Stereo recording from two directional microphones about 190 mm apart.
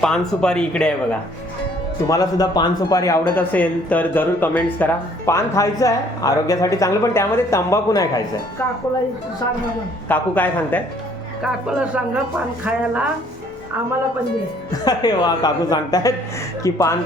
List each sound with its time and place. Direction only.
0.0 s speech: 5° left (ahead or behind)
2.0 s speech: 20° left (ahead or behind)
10.1 s speech: 10° left (ahead or behind)
11.4 s speech: 5° right (ahead or behind)
14.7 s speech: 20° left (ahead or behind)